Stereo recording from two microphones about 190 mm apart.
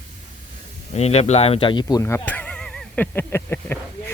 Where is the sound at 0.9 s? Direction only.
35° left (ahead or behind).